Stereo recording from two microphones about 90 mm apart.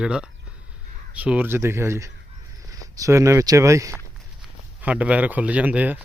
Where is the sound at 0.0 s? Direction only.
10° right (ahead or behind); by 3.9 s 35° right (ahead or behind).